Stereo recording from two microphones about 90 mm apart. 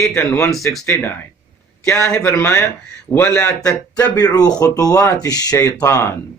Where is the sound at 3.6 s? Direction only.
35° left (ahead or behind).